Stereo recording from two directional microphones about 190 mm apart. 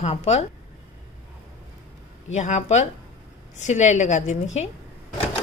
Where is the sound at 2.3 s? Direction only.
40° left (ahead or behind).